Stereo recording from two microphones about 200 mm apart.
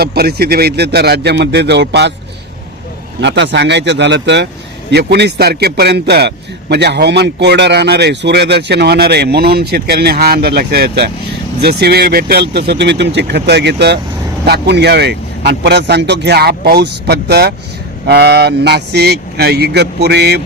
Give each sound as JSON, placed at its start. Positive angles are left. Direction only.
{"t": 0.0, "sound": "a man's voice", "side_deg": -50}
{"t": 3.2, "sound": "a man's voice", "side_deg": -60}